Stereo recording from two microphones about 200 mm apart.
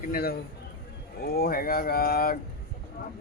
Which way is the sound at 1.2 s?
50° left (ahead or behind).